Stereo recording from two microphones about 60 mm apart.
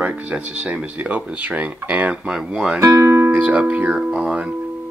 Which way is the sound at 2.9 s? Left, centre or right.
Right.